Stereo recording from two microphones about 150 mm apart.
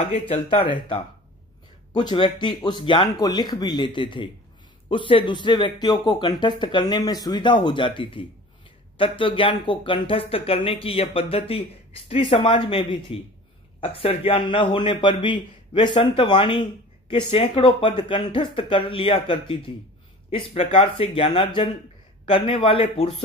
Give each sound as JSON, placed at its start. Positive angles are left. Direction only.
{"t": 0.0, "sound": "speech", "side_deg": 40}